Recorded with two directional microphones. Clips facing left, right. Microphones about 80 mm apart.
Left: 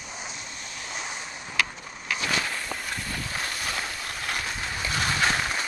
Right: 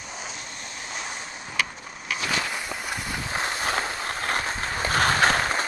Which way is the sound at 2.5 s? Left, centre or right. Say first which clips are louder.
Right 2 dB; centre.